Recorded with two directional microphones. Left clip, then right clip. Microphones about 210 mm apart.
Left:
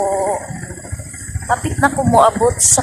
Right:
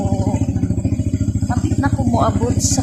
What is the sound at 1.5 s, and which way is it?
Speech, 30° left (ahead or behind).